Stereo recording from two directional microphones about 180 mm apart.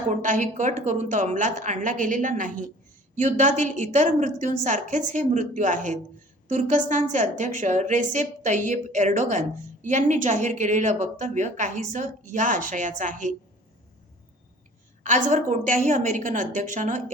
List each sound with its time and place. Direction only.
0.2 s speech: 45° right (ahead or behind)
15.0 s speech: 45° right (ahead or behind)